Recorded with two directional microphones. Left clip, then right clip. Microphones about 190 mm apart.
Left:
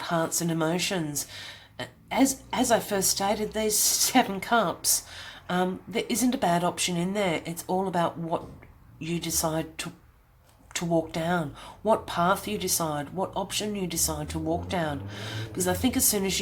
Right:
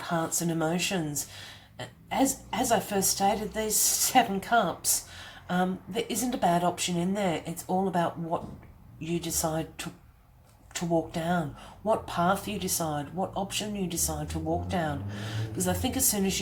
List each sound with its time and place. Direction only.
0.0 s speech: 30° left (ahead or behind)